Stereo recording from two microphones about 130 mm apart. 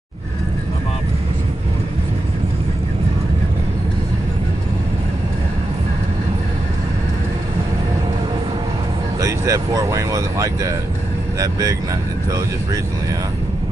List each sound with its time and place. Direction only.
9.2 s speech: 25° right (ahead or behind)